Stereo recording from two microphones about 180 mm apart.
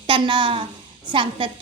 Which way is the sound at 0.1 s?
25° right (ahead or behind).